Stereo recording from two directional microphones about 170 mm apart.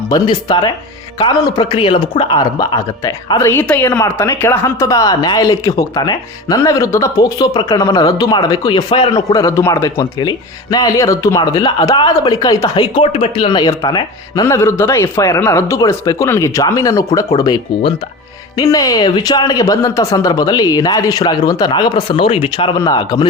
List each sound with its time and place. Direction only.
0.1 s speech: 25° left (ahead or behind)